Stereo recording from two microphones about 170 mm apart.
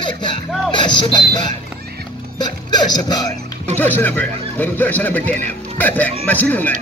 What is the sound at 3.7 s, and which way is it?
A man's voice, 10° left (ahead or behind).